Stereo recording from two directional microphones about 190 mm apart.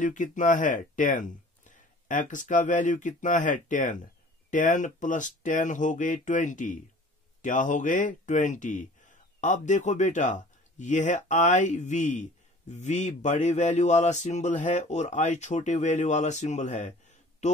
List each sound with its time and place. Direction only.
0.0 s speech: 40° left (ahead or behind)